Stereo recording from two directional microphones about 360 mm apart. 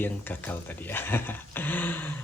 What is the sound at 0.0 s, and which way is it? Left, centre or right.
Speech, centre.